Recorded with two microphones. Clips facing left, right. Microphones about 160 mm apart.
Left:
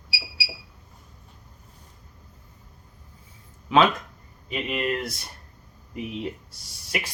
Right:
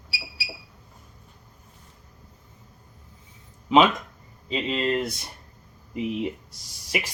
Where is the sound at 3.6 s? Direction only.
20° right (ahead or behind).